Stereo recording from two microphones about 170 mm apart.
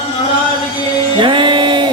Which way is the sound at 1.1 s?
30° right (ahead or behind).